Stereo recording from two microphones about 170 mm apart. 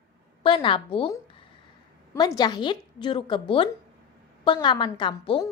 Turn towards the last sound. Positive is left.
turn(degrees=30)  # may be behind; listen again after turning